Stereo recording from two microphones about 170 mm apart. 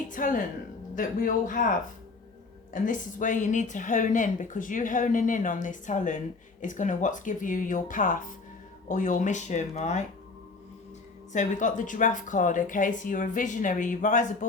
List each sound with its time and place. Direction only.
0.1 s speech: 50° left (ahead or behind)
2.7 s speech: 50° left (ahead or behind)
11.3 s speech: 45° left (ahead or behind)